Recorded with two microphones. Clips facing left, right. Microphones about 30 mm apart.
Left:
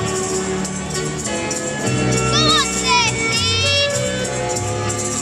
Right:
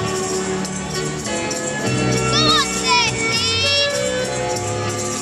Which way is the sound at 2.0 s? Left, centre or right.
Centre.